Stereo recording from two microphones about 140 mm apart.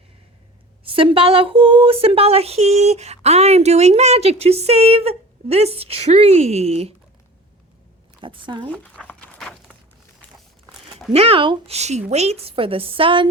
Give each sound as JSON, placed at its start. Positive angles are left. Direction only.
{"t": 0.9, "sound": "speech", "side_deg": -40}
{"t": 8.2, "sound": "a woman's voice", "side_deg": -35}
{"t": 8.7, "sound": "a sound", "side_deg": 10}
{"t": 11.1, "sound": "a woman's voice", "side_deg": -45}